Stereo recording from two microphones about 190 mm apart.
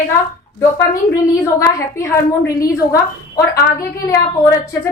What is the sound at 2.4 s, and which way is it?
Speech, 15° left (ahead or behind).